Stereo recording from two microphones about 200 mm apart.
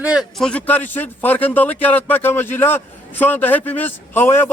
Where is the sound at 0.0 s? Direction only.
5° right (ahead or behind).